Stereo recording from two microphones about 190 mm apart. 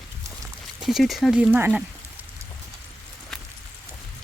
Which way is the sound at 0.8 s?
Centre (ahead or behind).